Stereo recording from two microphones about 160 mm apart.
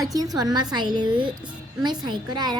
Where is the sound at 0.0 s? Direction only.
20° right (ahead or behind).